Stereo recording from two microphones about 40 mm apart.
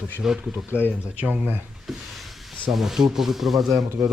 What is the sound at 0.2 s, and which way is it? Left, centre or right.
Speech, centre.